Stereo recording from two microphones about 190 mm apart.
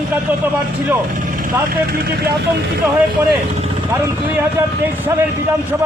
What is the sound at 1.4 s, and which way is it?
Speech, 50° right (ahead or behind).